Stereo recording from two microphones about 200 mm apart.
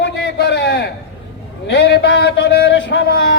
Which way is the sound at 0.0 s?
60° left (ahead or behind).